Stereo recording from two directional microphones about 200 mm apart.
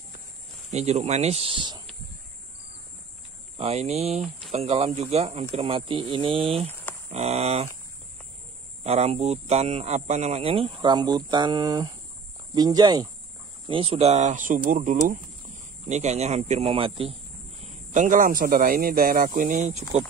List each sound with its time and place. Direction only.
0.7 s speech: 35° right (ahead or behind)
3.5 s speech: 30° right (ahead or behind)
8.8 s speech: 35° right (ahead or behind)
17.9 s speech: 40° right (ahead or behind)